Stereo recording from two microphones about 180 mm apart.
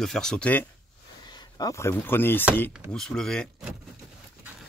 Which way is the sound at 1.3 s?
20° left (ahead or behind).